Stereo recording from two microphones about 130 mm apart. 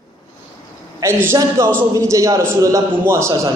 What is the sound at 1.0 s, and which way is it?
A woman's voice, 20° right (ahead or behind).